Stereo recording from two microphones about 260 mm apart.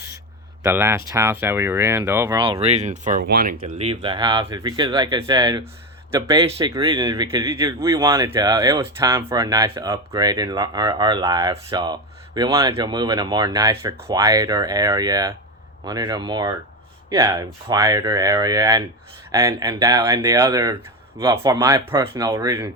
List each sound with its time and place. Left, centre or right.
0.6 s a man's voice: centre; by 3.5 s right
3.6 s a man's voice: right